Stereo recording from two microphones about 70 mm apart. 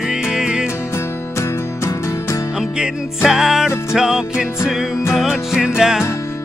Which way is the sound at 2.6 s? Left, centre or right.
Centre.